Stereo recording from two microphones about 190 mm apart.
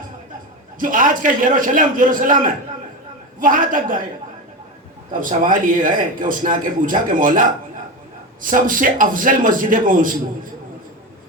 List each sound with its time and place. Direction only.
0.8 s speech: 45° right (ahead or behind)
5.2 s speech: 45° right (ahead or behind)